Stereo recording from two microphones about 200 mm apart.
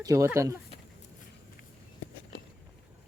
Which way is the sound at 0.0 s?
15° right (ahead or behind).